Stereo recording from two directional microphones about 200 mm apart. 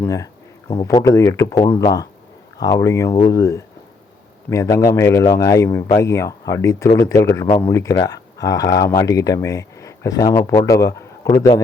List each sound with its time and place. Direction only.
0.0 s speech: 15° left (ahead or behind)